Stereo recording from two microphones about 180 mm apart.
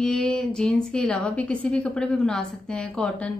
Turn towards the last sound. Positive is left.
turn(degrees=5)  # may be behind; listen again after turning